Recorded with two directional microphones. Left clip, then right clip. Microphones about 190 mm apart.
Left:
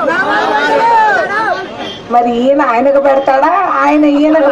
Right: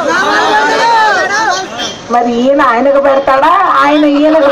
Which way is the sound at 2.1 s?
30° right (ahead or behind).